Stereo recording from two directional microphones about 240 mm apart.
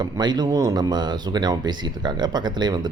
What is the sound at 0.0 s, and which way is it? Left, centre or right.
Speech, centre.